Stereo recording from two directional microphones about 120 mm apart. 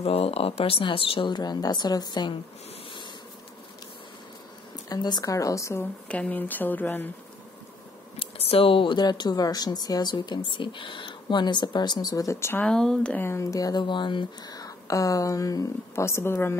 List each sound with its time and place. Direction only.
0.0 s speech: 55° left (ahead or behind); by 2.3 s 35° left (ahead or behind)
4.8 s speech: 35° left (ahead or behind)
6.0 s speech: 10° left (ahead or behind)
8.2 s speech: 55° left (ahead or behind); by 12.6 s 20° left (ahead or behind)
12.6 s speech: 5° left (ahead or behind); by 16.5 s 20° left (ahead or behind)